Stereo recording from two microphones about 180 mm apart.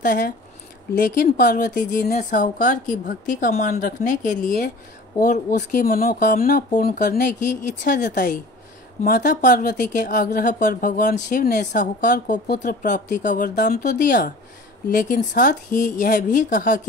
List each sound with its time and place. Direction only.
0.0 s speech: 50° left (ahead or behind)